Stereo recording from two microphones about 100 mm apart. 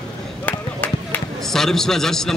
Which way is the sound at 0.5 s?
15° left (ahead or behind).